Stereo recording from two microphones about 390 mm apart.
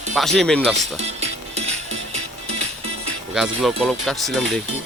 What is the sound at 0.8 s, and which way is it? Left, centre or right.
Music, centre.